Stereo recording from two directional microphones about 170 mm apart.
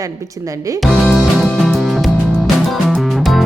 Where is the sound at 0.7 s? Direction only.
Centre (ahead or behind).